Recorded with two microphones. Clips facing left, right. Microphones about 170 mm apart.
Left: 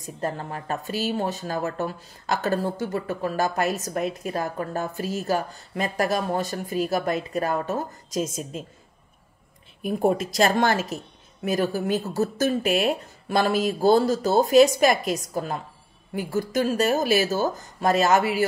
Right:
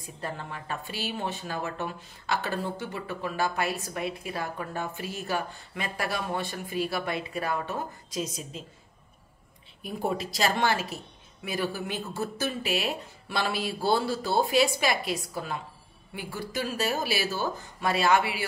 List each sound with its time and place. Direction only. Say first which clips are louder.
0.0 s speech: left 7 dB; 45° left (ahead or behind)
9.8 s speech: left 8 dB; 50° left (ahead or behind)